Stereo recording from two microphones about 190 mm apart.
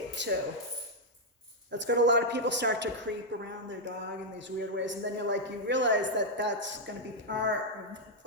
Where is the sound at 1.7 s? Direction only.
70° right (ahead or behind).